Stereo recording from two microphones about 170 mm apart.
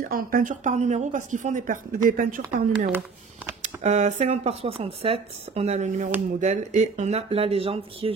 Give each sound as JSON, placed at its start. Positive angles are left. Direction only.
{"t": 0.1, "sound": "speech", "side_deg": -55}
{"t": 3.6, "sound": "speech", "side_deg": -45}